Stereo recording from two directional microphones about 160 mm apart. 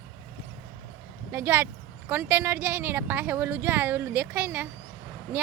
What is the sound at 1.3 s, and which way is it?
Speech, 15° right (ahead or behind).